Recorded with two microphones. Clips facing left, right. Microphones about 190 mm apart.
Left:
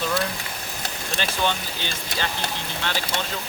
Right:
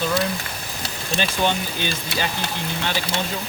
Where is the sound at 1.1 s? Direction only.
15° right (ahead or behind).